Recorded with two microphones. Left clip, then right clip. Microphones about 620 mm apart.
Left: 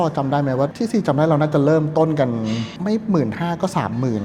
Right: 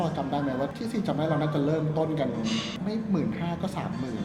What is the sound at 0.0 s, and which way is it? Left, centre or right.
Speech, left.